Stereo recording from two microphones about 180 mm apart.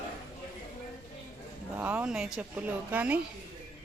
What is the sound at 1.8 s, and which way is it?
Speech, 5° right (ahead or behind).